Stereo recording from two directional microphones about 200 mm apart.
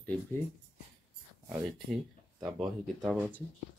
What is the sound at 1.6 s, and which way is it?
Speech, 5° right (ahead or behind).